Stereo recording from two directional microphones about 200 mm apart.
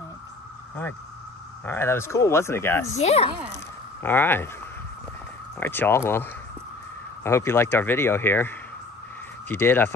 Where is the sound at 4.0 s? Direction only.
10° left (ahead or behind).